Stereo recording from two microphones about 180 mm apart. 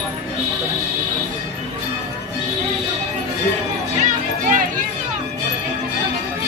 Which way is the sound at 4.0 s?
45° right (ahead or behind).